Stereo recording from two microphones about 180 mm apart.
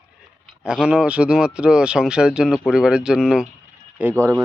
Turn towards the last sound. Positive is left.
turn(degrees=-15)  # may be behind; listen again after turning